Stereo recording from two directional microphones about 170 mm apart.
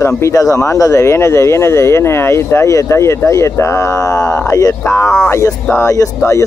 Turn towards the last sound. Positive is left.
turn(degrees=15)  # may be behind; listen again after turning